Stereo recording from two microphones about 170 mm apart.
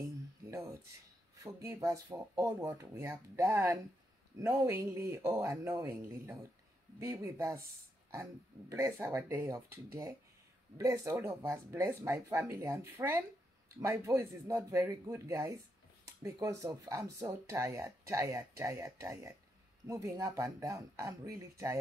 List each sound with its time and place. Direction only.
0.5 s music: 15° right (ahead or behind)
1.3 s speech: 20° right (ahead or behind)